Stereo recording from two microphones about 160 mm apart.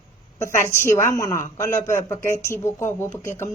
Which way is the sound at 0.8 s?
15° left (ahead or behind).